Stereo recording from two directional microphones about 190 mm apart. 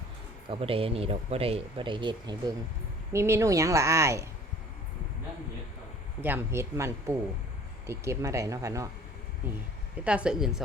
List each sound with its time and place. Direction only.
0.4 s speech: 30° right (ahead or behind)
6.2 s speech: 10° right (ahead or behind)
10.0 s a woman's voice: 5° right (ahead or behind)